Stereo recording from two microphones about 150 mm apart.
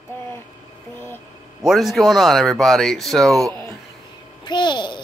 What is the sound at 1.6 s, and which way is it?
Speech, centre (ahead or behind).